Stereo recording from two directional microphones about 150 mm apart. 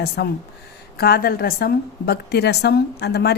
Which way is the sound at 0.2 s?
90° left.